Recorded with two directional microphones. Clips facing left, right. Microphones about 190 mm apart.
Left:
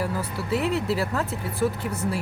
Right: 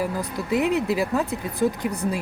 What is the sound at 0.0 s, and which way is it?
Speech, 15° right (ahead or behind).